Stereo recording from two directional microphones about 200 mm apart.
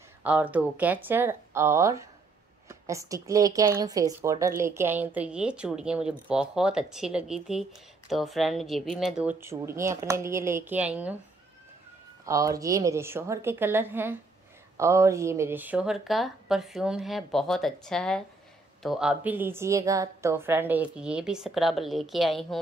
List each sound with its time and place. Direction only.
0.2 s a woman's voice: 10° right (ahead or behind)
12.3 s a woman's voice: 15° right (ahead or behind); by 22.6 s centre (ahead or behind)